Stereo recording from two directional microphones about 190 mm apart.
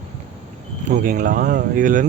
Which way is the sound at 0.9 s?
45° right (ahead or behind).